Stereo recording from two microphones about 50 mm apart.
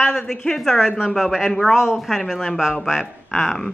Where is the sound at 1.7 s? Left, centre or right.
Centre.